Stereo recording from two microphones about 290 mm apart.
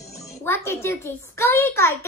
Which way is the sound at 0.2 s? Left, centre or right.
Centre.